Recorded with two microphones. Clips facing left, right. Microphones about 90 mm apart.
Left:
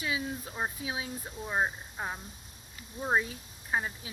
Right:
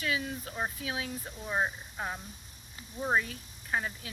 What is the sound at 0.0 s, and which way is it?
Speech, 20° left (ahead or behind).